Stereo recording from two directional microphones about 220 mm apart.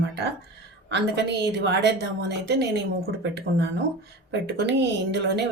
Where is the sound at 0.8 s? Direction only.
50° right (ahead or behind).